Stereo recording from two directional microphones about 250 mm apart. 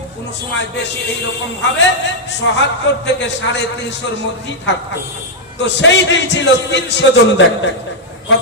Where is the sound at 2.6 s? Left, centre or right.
Left.